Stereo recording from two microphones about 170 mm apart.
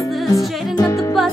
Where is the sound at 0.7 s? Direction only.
20° left (ahead or behind).